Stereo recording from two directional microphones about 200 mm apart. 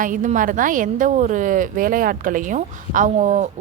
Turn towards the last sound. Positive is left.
turn(degrees=-40)  # may be behind; listen again after turning